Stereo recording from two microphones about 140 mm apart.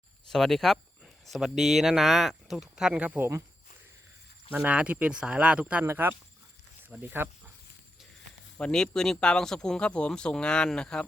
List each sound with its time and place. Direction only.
0.3 s speech: centre (ahead or behind); by 3.4 s 15° right (ahead or behind)
4.5 s speech: 10° right (ahead or behind)
8.5 s speech: 5° left (ahead or behind)